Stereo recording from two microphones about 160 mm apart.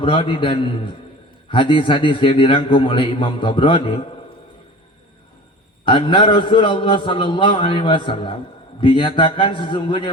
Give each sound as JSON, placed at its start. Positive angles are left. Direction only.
{"t": 0.0, "sound": "a man's voice", "side_deg": 30}
{"t": 5.8, "sound": "a man's voice", "side_deg": 30}